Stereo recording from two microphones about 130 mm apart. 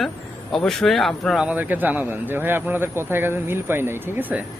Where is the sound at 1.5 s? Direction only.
15° right (ahead or behind).